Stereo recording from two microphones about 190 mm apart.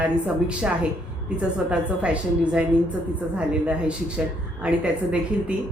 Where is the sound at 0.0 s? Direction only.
5° right (ahead or behind).